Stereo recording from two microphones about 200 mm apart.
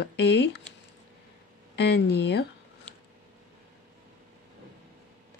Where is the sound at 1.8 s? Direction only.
55° left (ahead or behind).